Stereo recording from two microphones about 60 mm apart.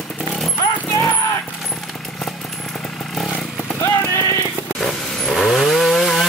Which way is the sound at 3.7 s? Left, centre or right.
Left.